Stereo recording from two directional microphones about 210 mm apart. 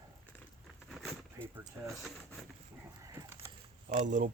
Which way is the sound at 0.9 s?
Centre (ahead or behind).